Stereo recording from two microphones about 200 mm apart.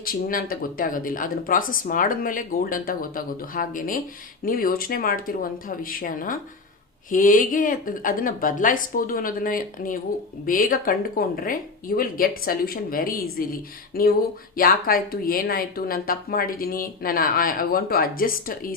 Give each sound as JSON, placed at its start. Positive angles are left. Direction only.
{"t": 0.0, "sound": "speech", "side_deg": 45}